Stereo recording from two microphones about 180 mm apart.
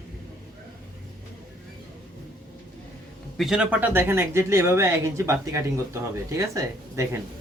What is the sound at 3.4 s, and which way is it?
Speech, 5° right (ahead or behind).